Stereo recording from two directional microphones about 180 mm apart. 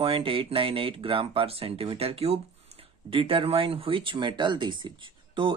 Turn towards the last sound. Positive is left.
turn(degrees=-30)  # may be behind; listen again after turning